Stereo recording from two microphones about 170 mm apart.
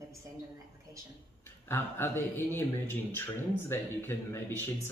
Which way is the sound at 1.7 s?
15° left (ahead or behind).